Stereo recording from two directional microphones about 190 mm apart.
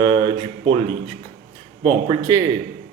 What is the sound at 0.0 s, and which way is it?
Speech, 25° right (ahead or behind).